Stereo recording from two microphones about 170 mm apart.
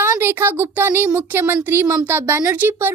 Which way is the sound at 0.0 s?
15° right (ahead or behind).